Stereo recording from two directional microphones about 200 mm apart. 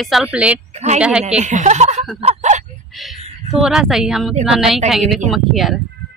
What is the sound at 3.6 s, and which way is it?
A woman's voice, 5° right (ahead or behind).